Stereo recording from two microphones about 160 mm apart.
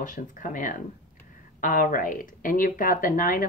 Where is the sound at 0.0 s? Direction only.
55° left (ahead or behind).